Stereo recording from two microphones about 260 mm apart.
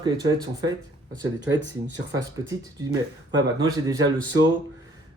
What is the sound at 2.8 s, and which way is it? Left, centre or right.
Speech, centre.